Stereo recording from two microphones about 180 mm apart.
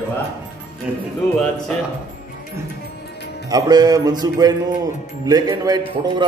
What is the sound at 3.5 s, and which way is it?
A man's voice, 20° right (ahead or behind).